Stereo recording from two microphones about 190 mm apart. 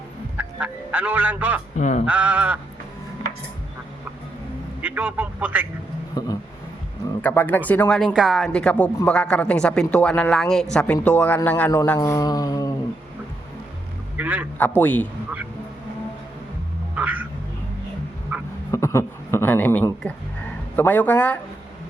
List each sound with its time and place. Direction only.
0.3 s fowl: 5° right (ahead or behind)
1.7 s speech: 40° left (ahead or behind)
2.0 s a man's voice: 5° right (ahead or behind)
4.8 s a man's voice: 5° right (ahead or behind)
6.2 s mantra: 20° left (ahead or behind)
7.2 s speech: 10° left (ahead or behind)
11.9 s mantra: 20° left (ahead or behind)
14.2 s a man's voice: 10° right (ahead or behind)
14.8 s speech: 10° left (ahead or behind)
16.9 s a sound: 10° right (ahead or behind)
18.3 s a sound: 10° right (ahead or behind)
18.7 s a sound: 15° left (ahead or behind)
20.7 s speech: 10° left (ahead or behind)